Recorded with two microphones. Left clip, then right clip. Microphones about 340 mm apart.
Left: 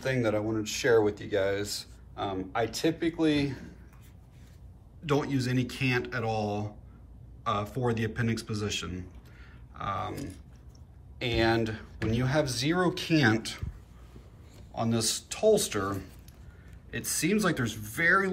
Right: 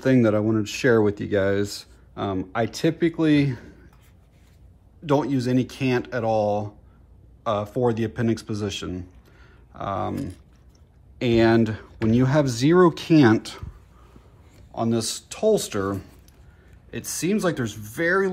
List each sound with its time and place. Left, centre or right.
0.0 s speech: centre
5.0 s speech: centre
14.8 s speech: centre